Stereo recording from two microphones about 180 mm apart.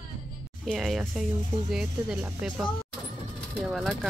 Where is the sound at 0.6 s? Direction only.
Centre (ahead or behind).